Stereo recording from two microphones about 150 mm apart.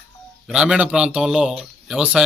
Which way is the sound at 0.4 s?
5° right (ahead or behind).